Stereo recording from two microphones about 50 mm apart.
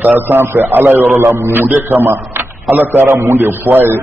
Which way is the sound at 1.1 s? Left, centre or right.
Right.